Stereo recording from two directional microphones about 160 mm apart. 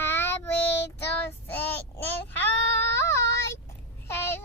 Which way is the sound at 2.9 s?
15° left (ahead or behind).